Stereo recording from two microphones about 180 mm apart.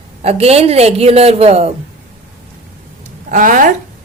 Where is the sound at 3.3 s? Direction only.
45° right (ahead or behind).